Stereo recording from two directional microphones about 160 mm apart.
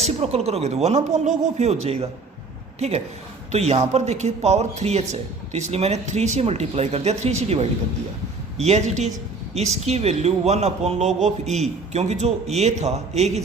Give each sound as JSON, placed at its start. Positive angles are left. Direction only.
{"t": 0.0, "sound": "a woman's voice", "side_deg": -40}